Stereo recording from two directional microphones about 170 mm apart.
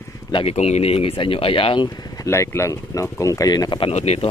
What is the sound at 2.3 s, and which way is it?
Speech, 15° left (ahead or behind).